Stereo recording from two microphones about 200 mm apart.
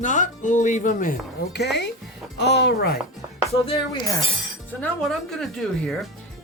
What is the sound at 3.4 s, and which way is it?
Speech, 30° left (ahead or behind).